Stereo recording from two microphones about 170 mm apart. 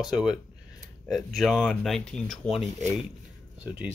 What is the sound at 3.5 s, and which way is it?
Speech, 10° right (ahead or behind).